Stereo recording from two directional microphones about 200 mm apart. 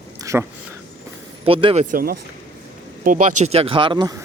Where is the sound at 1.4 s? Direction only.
25° right (ahead or behind).